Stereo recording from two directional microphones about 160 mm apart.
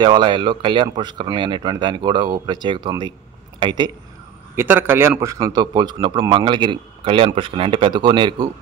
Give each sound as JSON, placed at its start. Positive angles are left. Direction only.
{"t": 0.0, "sound": "a man's voice", "side_deg": -30}
{"t": 4.6, "sound": "a man's voice", "side_deg": -15}